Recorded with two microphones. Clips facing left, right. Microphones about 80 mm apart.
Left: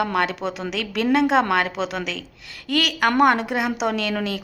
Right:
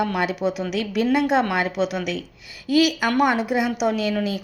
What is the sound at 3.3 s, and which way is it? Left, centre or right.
Speech, centre.